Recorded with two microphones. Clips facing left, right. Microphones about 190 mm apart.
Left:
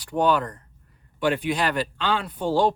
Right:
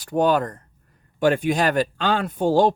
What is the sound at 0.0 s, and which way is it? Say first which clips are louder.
Speech: right 2 dB; 45° right (ahead or behind).